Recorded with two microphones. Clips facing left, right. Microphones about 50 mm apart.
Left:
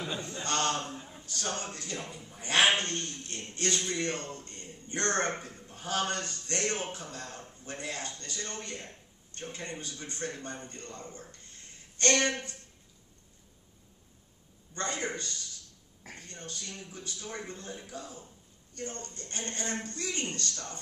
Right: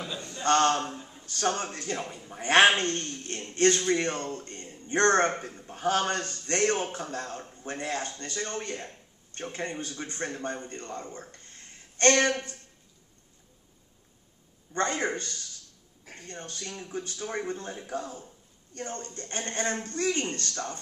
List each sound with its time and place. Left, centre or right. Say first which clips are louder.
0.4 s a man's voice: right 9 dB; right
0.9 s a sound: right 1 dB; centre
1.2 s a man's voice: right 8 dB; right
14.7 s a man's voice: right 6 dB; right